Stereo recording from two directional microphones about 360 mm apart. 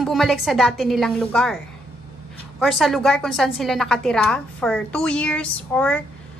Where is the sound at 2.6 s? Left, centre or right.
Centre.